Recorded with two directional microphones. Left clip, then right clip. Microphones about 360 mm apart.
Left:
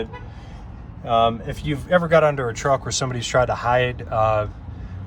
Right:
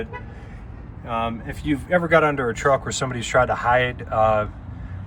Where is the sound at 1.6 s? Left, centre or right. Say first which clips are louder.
Left 1 dB; centre.